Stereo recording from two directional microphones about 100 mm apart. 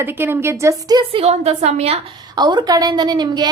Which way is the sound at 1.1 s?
90° right.